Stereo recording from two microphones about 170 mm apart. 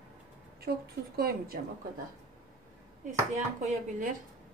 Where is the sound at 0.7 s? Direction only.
60° right (ahead or behind).